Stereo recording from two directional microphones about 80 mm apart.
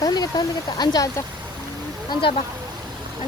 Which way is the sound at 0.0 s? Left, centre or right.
Left.